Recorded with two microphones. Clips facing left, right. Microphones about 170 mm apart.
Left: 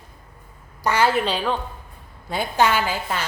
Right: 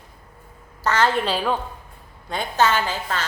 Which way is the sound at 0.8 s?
10° left (ahead or behind).